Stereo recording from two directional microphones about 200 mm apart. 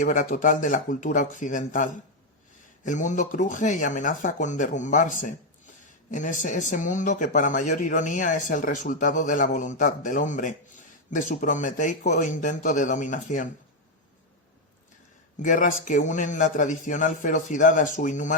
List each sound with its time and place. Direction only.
0.0 s speech: 40° left (ahead or behind)
15.4 s speech: 40° left (ahead or behind)